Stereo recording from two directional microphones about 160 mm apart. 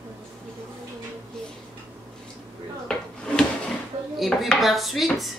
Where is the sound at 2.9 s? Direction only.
5° left (ahead or behind).